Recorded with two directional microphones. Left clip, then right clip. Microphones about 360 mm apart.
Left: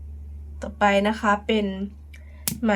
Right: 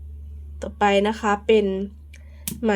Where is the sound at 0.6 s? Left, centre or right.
Centre.